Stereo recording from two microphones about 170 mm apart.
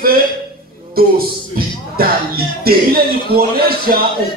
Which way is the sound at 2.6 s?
60° right (ahead or behind).